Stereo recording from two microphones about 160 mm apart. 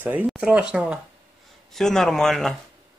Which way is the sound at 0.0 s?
10° right (ahead or behind).